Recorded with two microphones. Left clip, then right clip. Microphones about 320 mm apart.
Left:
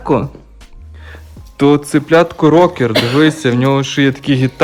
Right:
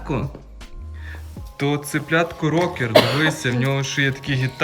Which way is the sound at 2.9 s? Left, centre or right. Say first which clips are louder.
Left 1 dB; right.